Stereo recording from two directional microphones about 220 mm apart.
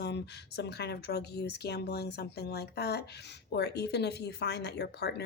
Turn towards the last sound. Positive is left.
turn(degrees=50)  # may be behind; listen again after turning